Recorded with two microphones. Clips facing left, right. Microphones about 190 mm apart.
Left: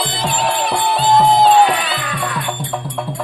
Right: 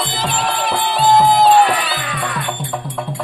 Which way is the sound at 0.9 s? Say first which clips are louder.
Right 1 dB; centre (ahead or behind).